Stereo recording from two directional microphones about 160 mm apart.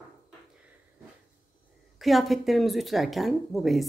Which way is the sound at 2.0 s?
Centre (ahead or behind).